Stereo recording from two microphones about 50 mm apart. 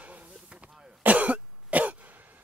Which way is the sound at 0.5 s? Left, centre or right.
Right.